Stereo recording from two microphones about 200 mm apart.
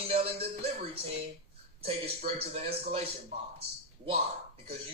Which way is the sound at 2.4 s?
30° right (ahead or behind).